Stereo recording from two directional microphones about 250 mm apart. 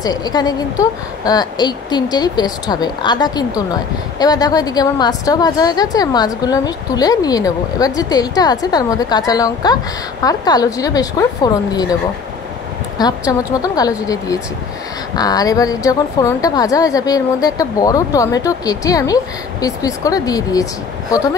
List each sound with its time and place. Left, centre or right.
0.0 s a woman's voice: centre
13.3 s a woman's voice: centre